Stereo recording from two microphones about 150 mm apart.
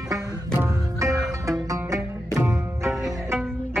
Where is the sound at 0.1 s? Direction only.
15° right (ahead or behind).